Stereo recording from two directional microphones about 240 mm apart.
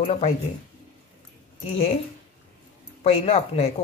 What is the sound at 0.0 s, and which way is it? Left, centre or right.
Speech, left.